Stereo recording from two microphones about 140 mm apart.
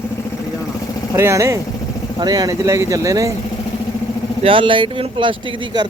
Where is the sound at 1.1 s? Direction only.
20° right (ahead or behind).